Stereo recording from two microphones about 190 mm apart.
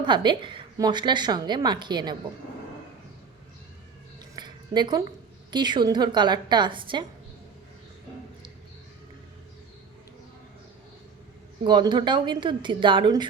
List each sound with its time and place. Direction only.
0.0 s a woman's voice: 25° right (ahead or behind)
4.4 s a sound: 25° right (ahead or behind)
5.5 s a woman's voice: 25° right (ahead or behind)
11.6 s a woman's voice: 25° right (ahead or behind)